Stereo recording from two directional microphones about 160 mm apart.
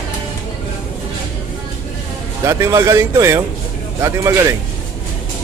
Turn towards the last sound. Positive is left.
turn(degrees=-20)  # may be behind; listen again after turning